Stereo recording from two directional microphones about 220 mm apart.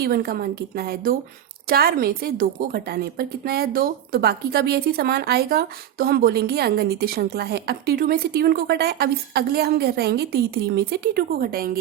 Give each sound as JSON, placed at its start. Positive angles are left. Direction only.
{"t": 0.0, "sound": "a woman's voice", "side_deg": -45}